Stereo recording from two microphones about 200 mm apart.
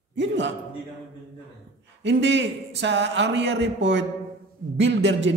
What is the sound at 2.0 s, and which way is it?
A man's voice, 60° right (ahead or behind).